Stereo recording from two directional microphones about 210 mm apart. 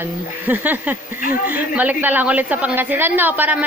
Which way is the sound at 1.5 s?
10° right (ahead or behind).